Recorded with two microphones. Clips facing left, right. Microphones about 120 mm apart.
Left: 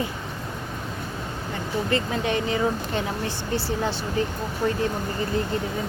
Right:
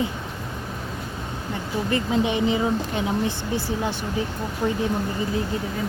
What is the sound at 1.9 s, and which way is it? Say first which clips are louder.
Speech: right 3 dB; 15° right (ahead or behind).